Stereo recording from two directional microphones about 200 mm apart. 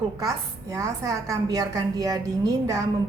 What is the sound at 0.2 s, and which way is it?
A woman's voice, 15° right (ahead or behind).